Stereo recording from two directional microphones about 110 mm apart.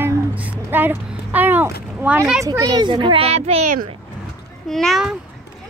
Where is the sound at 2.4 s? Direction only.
35° right (ahead or behind); by 3.6 s 70° right (ahead or behind).